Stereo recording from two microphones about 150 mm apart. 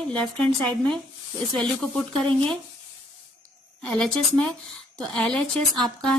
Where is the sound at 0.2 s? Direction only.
5° left (ahead or behind).